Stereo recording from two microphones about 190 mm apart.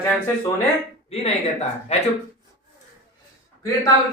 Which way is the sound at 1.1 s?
35° left (ahead or behind).